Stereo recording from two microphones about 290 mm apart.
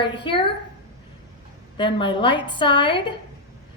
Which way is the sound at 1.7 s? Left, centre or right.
Centre.